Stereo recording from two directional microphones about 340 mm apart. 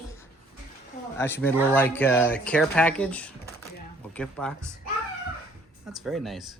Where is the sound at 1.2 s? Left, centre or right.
Centre.